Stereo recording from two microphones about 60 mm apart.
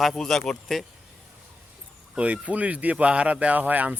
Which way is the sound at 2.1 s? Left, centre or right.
Right.